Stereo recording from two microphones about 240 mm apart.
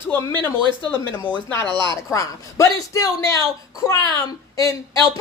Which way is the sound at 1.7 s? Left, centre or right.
Centre.